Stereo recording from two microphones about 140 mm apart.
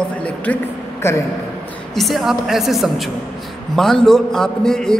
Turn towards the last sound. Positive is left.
turn(degrees=5)  # may be behind; listen again after turning